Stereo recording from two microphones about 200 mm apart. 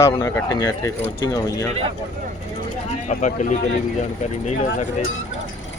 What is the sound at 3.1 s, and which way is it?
Speech, 40° left (ahead or behind).